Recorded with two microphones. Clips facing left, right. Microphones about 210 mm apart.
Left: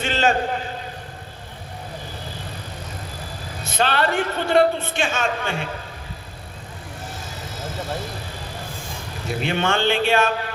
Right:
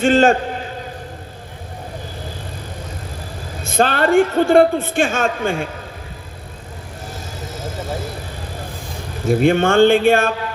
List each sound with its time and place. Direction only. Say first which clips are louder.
0.0 s a man's voice: right 8 dB; 50° right (ahead or behind)
3.6 s a man's voice: right 5 dB; 50° right (ahead or behind)
9.2 s a man's voice: right 9 dB; 50° right (ahead or behind)